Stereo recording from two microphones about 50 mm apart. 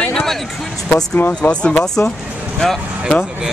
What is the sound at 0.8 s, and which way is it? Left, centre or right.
Speech, centre.